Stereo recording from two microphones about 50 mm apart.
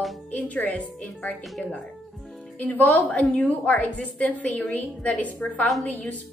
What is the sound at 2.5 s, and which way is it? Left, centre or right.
A woman's voice, left.